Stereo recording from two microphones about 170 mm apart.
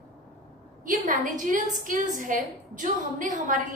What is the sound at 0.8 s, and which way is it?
A woman's voice, 50° right (ahead or behind).